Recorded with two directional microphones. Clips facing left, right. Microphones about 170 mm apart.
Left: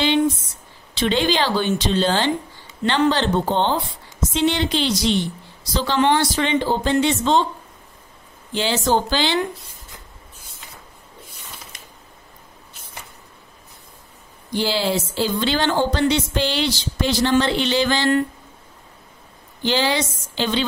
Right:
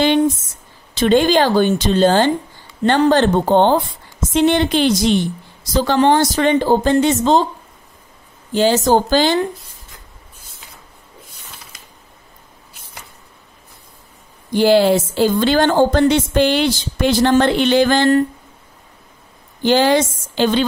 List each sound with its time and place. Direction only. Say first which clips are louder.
0.0 s a woman's voice: right 4 dB; 50° right (ahead or behind)
8.5 s a woman's voice: right 6 dB; 45° right (ahead or behind)
14.5 s a woman's voice: right 9 dB; 55° right (ahead or behind)
19.6 s a woman's voice: right 7 dB; 50° right (ahead or behind)